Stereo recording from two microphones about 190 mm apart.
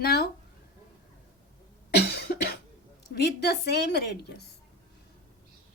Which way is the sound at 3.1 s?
60° left (ahead or behind).